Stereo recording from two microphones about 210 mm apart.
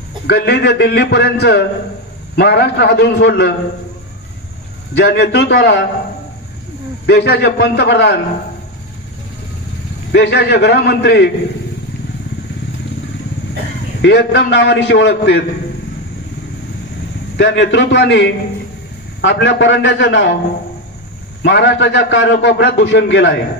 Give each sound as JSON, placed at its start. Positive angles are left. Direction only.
{"t": 0.3, "sound": "a man's voice", "side_deg": 50}
{"t": 4.9, "sound": "a man's voice", "side_deg": 50}
{"t": 7.1, "sound": "a man's voice", "side_deg": 55}
{"t": 10.1, "sound": "a man's voice", "side_deg": 55}
{"t": 14.0, "sound": "a man's voice", "side_deg": 55}
{"t": 17.4, "sound": "a man's voice", "side_deg": 60}
{"t": 21.4, "sound": "a man's voice", "side_deg": 55}